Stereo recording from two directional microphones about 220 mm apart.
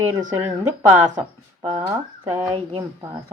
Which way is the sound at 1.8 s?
15° right (ahead or behind).